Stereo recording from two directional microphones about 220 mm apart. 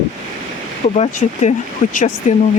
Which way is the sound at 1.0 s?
30° left (ahead or behind).